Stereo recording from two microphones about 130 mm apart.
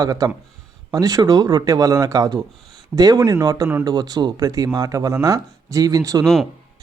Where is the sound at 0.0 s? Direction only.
30° right (ahead or behind).